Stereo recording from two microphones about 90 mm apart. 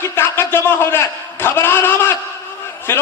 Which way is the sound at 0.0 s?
25° left (ahead or behind).